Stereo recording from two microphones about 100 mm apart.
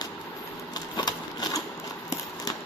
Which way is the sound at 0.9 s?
45° left (ahead or behind).